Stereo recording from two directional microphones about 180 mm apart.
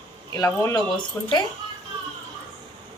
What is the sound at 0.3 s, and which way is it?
Speech, 15° left (ahead or behind).